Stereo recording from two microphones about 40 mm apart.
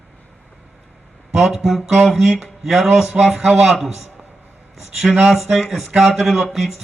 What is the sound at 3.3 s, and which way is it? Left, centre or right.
Speech, centre.